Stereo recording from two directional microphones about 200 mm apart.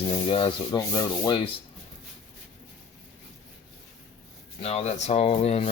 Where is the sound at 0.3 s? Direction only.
25° left (ahead or behind).